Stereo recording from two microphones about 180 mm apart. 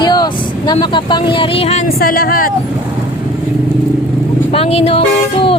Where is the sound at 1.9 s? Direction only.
55° left (ahead or behind).